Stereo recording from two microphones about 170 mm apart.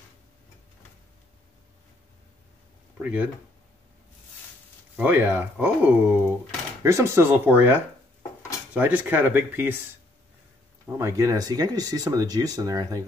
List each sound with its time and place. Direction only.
3.0 s speech: 10° right (ahead or behind)
4.9 s speech: 10° right (ahead or behind)
11.0 s speech: 20° right (ahead or behind)